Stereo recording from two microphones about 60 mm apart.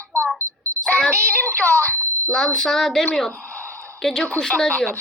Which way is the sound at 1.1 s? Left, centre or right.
Right.